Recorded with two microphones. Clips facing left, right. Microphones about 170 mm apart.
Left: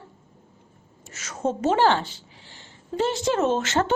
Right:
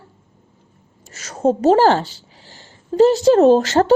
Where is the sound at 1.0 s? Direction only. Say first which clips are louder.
Right 9 dB; 35° right (ahead or behind).